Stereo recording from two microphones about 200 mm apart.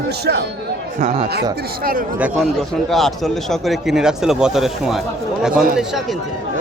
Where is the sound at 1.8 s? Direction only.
45° right (ahead or behind).